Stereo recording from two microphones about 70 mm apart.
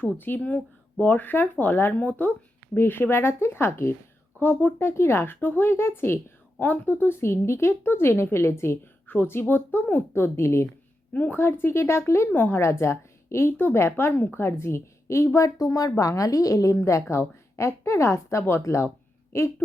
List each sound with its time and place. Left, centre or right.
0.0 s speech: left
2.0 s speech: left
4.4 s speech: left
11.1 s a woman's voice: left